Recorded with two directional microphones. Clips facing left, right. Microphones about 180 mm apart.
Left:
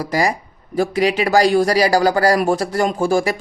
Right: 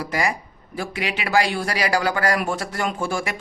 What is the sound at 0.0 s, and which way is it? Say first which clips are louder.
Speech: left 5 dB; 35° left (ahead or behind).